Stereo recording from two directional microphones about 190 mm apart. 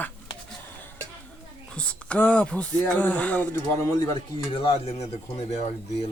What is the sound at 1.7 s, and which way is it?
Speech, 5° left (ahead or behind).